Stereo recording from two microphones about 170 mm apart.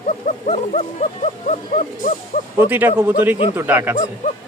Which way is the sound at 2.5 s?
10° right (ahead or behind).